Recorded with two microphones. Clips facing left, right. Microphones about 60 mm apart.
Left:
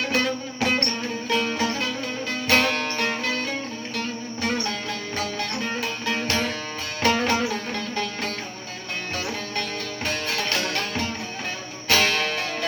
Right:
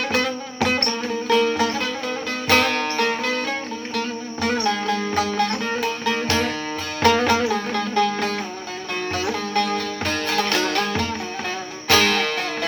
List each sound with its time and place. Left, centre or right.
0.1 s music: right
2.5 s music: right